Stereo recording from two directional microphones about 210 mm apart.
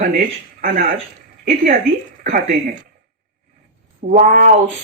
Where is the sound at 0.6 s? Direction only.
45° right (ahead or behind).